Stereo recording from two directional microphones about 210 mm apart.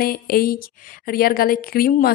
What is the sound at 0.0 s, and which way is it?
A woman's voice, 45° left (ahead or behind).